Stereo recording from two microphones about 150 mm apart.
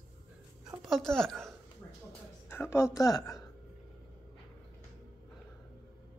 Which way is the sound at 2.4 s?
15° left (ahead or behind).